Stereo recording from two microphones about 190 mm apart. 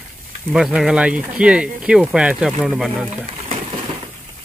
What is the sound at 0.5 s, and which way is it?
Speech, 5° right (ahead or behind).